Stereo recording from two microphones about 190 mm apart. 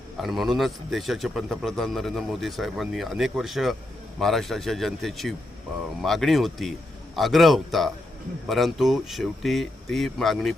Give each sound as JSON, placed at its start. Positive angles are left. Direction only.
{"t": 0.2, "sound": "a man's voice", "side_deg": 0}